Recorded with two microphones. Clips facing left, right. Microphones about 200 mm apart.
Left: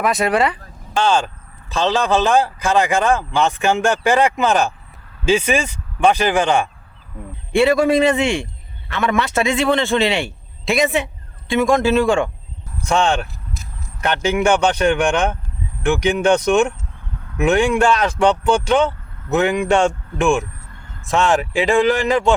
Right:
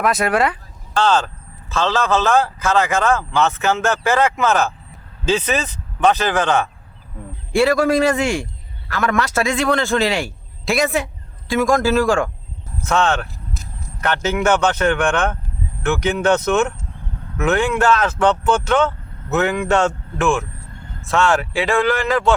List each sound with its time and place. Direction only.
0.0 s a man's voice: centre (ahead or behind)
0.9 s speech: 10° left (ahead or behind)
7.5 s a man's voice: centre (ahead or behind)
12.8 s speech: 15° left (ahead or behind)